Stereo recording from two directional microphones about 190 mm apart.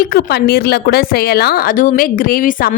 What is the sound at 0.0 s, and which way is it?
A woman's voice, 50° left (ahead or behind).